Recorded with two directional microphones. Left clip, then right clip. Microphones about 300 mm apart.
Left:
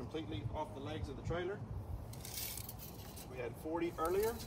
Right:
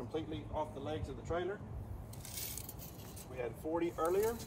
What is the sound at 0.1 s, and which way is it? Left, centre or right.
Speech, centre.